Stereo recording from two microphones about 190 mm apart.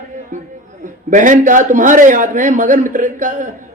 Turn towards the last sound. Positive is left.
turn(degrees=-45)  # may be behind; listen again after turning